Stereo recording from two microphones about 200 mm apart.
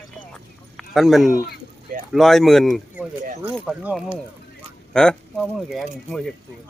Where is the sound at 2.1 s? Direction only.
Centre (ahead or behind).